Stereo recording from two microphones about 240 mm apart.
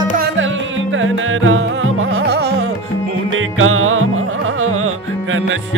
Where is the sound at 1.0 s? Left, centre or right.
Right.